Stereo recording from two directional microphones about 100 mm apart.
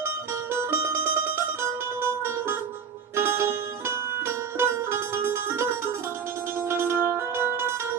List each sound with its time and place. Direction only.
0.5 s music: 25° right (ahead or behind)